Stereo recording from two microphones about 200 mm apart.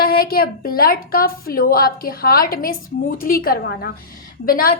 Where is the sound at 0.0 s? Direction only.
50° left (ahead or behind).